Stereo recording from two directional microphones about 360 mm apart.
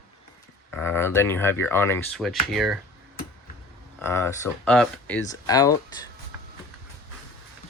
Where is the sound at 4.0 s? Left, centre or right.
Centre.